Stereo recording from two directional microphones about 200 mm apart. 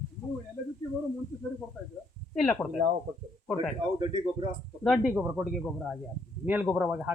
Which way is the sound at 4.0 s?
25° right (ahead or behind).